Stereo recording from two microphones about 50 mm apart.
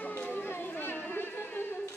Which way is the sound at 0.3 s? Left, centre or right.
Left.